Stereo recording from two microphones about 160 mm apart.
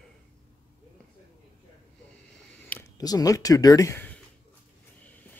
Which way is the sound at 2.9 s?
25° left (ahead or behind).